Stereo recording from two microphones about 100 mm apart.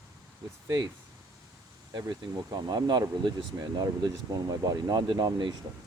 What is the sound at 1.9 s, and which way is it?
Speech, 40° right (ahead or behind).